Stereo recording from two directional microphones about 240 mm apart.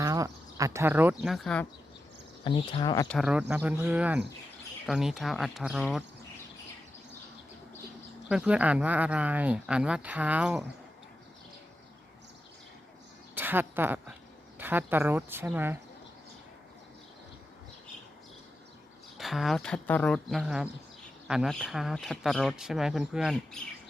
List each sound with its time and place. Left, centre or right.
0.0 s speech: centre
2.4 s speech: left
3.1 s speech: centre
8.3 s speech: centre
13.3 s speech: centre
19.1 s speech: centre